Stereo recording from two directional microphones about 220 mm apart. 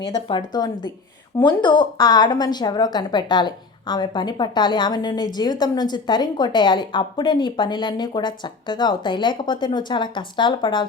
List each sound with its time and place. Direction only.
0.0 s a woman's voice: 20° left (ahead or behind)